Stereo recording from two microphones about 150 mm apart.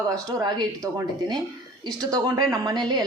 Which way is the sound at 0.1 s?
25° right (ahead or behind).